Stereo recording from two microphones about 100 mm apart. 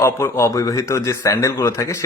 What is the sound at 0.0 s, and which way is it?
Speech, 25° left (ahead or behind).